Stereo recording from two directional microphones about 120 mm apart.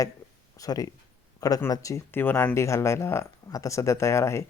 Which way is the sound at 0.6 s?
30° left (ahead or behind).